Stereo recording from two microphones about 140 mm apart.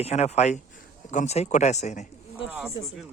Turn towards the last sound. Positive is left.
turn(degrees=-5)  # may be behind; listen again after turning